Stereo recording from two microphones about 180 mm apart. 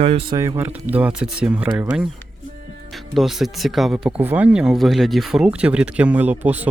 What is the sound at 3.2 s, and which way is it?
Speech, centre (ahead or behind).